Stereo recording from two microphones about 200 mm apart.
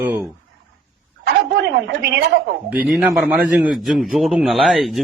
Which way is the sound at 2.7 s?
5° right (ahead or behind).